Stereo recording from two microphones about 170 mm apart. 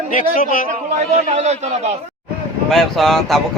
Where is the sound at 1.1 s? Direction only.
40° right (ahead or behind).